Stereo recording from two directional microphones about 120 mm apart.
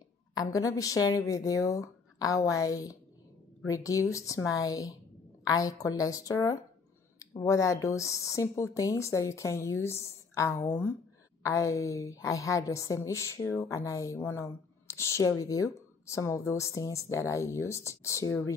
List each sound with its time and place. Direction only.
0.3 s speech: 30° left (ahead or behind)